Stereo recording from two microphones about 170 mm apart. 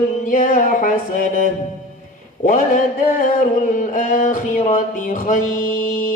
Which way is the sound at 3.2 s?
50° left (ahead or behind).